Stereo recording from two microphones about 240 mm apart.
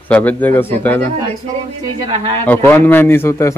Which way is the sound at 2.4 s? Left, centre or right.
Centre.